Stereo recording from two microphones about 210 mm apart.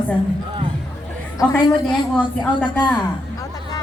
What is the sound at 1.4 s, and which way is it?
A woman's voice, 15° left (ahead or behind).